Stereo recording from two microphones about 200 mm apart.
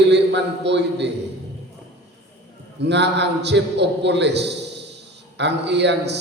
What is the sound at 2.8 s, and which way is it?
A man's voice, 60° right (ahead or behind).